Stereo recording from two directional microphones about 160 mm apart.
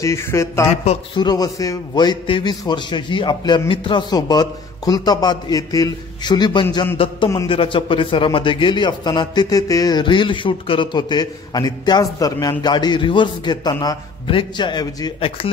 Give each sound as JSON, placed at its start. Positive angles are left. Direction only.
{"t": 0.0, "sound": "a man's voice", "side_deg": 15}